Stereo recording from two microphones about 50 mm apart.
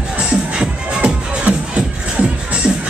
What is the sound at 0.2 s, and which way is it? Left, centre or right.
Music, centre.